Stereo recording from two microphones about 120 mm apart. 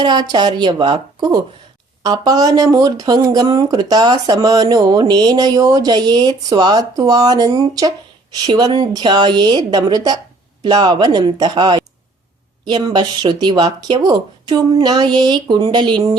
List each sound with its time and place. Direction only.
0.0 s speech: 35° right (ahead or behind)